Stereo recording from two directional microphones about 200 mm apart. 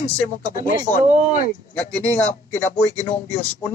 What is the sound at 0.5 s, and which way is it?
Speech, 45° left (ahead or behind).